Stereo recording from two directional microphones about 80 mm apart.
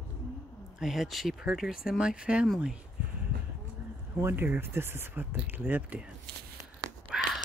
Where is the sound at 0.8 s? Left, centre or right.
Centre.